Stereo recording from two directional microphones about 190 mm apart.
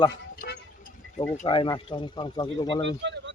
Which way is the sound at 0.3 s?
60° left (ahead or behind).